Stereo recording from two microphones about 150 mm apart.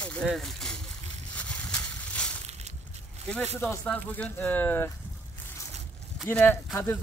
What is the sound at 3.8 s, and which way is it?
Speech, 10° left (ahead or behind).